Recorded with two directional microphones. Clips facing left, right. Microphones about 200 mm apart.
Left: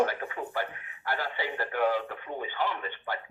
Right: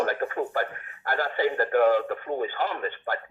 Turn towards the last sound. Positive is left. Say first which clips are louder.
# right 4 dB
turn(degrees=-45)  # may be behind; listen again after turning